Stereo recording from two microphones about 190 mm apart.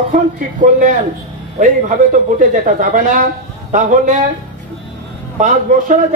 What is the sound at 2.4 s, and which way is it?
A man's voice, 45° right (ahead or behind).